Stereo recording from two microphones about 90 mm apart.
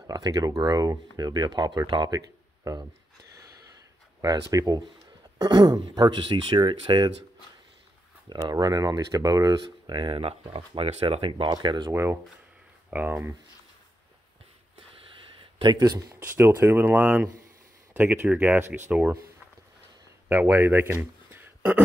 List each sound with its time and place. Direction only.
0.0 s speech: 50° right (ahead or behind)
2.0 s speech: 40° right (ahead or behind)
4.2 s speech: 40° right (ahead or behind); by 7.1 s 60° right (ahead or behind)
8.5 s speech: 50° right (ahead or behind); by 11.5 s 90° right
11.5 s speech: 60° right (ahead or behind)
11.9 s speech: 30° right (ahead or behind)
14.8 s wheeze: 90° right
15.6 s speech: 45° right (ahead or behind)
16.2 s speech: 25° right (ahead or behind)
20.2 s speech: 25° right (ahead or behind)